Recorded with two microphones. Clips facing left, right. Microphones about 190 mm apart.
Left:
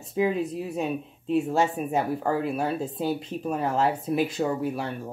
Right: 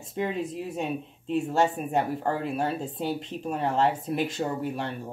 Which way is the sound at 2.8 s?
40° left (ahead or behind).